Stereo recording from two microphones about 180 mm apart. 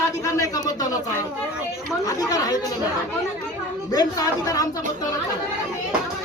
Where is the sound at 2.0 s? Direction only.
20° left (ahead or behind).